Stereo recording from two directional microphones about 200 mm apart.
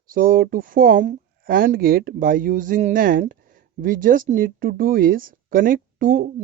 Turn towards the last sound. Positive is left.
turn(degrees=-45)  # may be behind; listen again after turning